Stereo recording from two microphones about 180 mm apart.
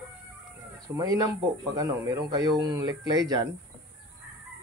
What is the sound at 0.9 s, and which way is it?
Speech, 20° right (ahead or behind).